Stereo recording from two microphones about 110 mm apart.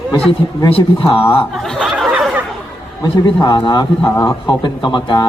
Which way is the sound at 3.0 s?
40° left (ahead or behind).